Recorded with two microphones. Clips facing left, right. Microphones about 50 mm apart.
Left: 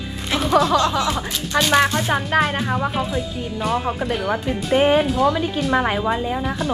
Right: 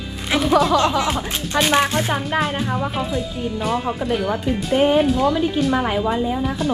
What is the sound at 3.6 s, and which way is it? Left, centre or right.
Speech, centre.